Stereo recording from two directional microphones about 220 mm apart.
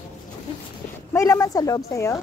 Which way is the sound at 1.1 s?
15° left (ahead or behind).